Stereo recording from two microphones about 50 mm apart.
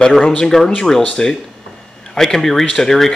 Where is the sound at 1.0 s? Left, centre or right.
Left.